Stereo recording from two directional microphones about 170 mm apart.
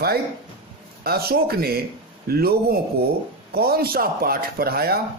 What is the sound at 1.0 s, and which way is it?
A man's voice, 65° right (ahead or behind).